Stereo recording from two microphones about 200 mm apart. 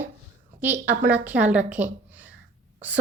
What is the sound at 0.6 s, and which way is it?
A woman's voice, 10° right (ahead or behind).